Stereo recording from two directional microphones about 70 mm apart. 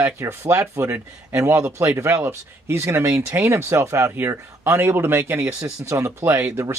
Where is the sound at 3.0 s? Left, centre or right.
Centre.